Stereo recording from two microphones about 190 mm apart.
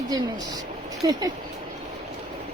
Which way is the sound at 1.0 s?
20° right (ahead or behind).